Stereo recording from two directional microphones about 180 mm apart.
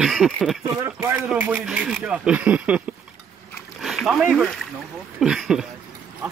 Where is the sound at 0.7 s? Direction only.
15° right (ahead or behind).